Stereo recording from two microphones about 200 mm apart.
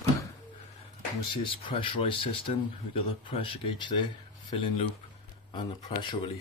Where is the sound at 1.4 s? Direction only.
25° left (ahead or behind).